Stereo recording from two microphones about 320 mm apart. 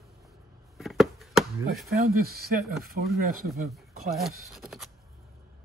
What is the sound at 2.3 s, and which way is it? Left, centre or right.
Speech, right.